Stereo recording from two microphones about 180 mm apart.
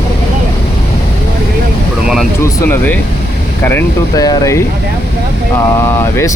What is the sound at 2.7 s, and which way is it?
Speech, 10° left (ahead or behind).